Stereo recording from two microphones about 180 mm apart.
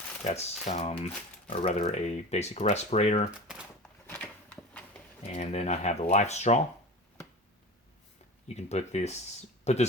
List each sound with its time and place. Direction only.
0.3 s speech: 40° left (ahead or behind)
4.0 s a sound: 10° left (ahead or behind)
5.3 s speech: 40° left (ahead or behind)
8.4 s speech: 35° left (ahead or behind)